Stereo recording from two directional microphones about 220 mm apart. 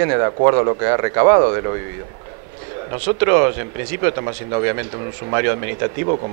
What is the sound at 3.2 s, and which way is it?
Speech, 20° right (ahead or behind).